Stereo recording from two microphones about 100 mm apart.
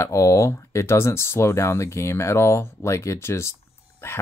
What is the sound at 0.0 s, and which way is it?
Speech, 30° left (ahead or behind).